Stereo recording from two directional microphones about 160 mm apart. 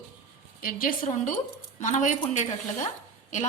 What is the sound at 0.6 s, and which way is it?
Speech, 65° left (ahead or behind).